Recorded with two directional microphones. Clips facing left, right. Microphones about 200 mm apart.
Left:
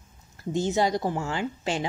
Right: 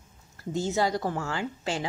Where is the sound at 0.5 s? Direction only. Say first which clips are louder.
Left 2 dB; 20° left (ahead or behind).